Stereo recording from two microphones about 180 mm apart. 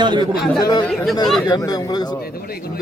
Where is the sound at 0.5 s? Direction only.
20° left (ahead or behind).